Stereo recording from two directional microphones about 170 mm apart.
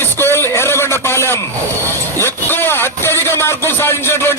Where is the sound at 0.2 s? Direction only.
15° left (ahead or behind).